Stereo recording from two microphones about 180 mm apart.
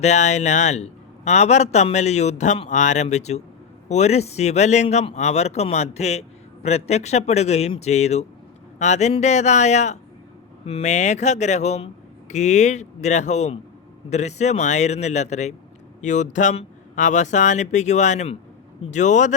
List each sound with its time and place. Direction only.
0.0 s speech: 40° left (ahead or behind)